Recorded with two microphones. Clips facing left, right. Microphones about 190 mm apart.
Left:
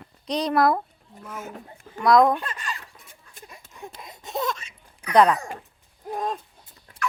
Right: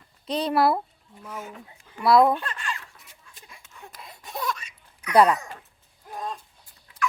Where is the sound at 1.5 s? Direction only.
45° left (ahead or behind).